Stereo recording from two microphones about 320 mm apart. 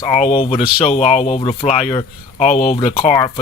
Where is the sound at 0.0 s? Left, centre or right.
Centre.